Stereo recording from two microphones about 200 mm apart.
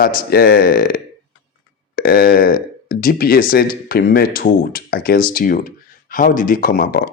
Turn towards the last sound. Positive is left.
turn(degrees=45)  # may be behind; listen again after turning